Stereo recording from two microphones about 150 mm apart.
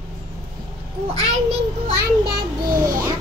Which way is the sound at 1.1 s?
45° right (ahead or behind).